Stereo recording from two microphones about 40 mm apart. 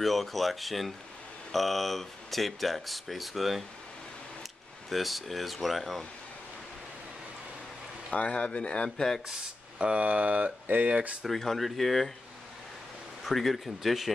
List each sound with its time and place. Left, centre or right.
0.0 s speech: centre
8.1 s speech: left
9.8 s speech: right
10.0 s speech: right
11.2 s speech: centre
13.2 s speech: centre